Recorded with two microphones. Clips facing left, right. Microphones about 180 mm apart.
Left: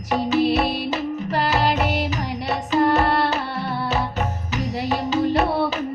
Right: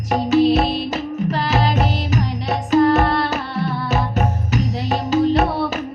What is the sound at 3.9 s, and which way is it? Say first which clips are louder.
Music: right 3 dB; 45° right (ahead or behind).